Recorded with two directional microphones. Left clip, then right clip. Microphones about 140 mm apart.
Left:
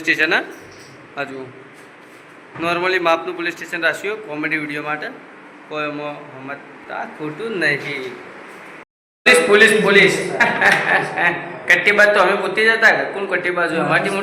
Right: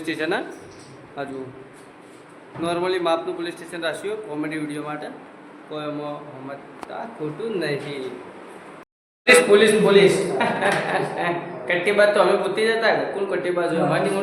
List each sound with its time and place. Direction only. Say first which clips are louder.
0.0 s a man's voice: left 8 dB; 15° right (ahead or behind)
2.6 s a man's voice: left 5 dB; 10° right (ahead or behind)
7.2 s a man's voice: left 4 dB; 10° right (ahead or behind)
9.2 s a man's voice: left 3 dB; centre (ahead or behind)